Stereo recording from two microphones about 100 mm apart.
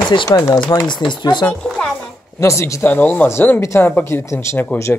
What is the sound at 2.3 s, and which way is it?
Speech, 30° left (ahead or behind).